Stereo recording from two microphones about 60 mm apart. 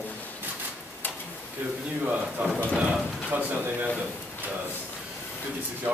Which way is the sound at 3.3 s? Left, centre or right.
Right.